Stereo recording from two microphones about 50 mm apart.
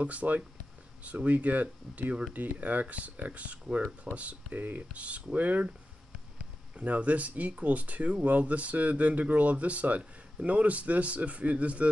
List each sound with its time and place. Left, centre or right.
0.0 s speech: right
6.8 s speech: right